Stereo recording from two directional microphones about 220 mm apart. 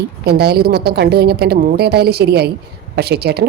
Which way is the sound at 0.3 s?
45° right (ahead or behind).